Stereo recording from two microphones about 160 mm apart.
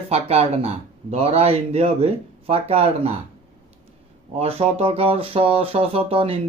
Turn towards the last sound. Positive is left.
turn(degrees=-35)  # may be behind; listen again after turning